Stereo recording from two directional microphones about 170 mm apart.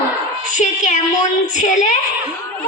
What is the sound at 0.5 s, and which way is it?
A woman's voice, 45° left (ahead or behind).